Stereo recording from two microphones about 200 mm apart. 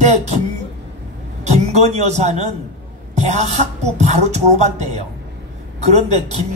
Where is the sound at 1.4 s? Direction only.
35° right (ahead or behind).